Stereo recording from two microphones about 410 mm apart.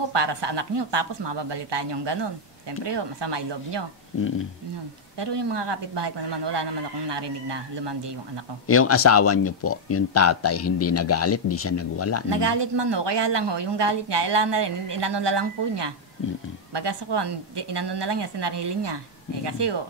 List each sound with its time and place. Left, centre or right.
0.1 s speech: right
5.2 s speech: right
8.6 s speech: left
12.3 s a woman's voice: right